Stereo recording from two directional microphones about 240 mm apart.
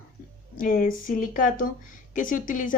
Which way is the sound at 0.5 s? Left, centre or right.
Left.